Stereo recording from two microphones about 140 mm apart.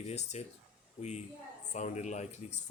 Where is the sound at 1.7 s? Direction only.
60° left (ahead or behind).